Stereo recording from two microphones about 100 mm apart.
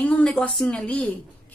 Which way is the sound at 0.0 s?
15° left (ahead or behind).